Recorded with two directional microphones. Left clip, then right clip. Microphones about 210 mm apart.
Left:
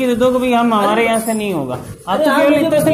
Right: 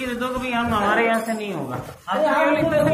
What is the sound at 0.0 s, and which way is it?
Speech, 55° left (ahead or behind).